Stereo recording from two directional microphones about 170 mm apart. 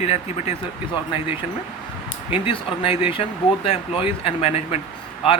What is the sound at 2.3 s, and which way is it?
Speech, 30° left (ahead or behind).